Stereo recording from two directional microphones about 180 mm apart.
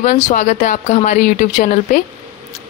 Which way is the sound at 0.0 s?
45° left (ahead or behind).